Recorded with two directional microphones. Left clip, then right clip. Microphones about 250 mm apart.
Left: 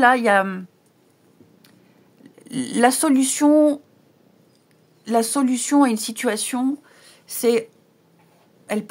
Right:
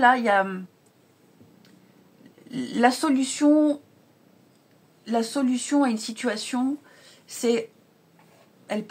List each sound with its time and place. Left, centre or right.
0.0 s speech: left
2.4 s speech: left
5.0 s speech: left
8.7 s speech: left